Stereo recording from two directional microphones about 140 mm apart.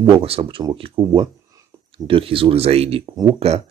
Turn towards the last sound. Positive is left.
turn(degrees=-50)  # may be behind; listen again after turning